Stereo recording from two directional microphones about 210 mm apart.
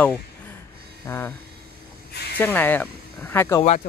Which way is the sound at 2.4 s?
10° left (ahead or behind).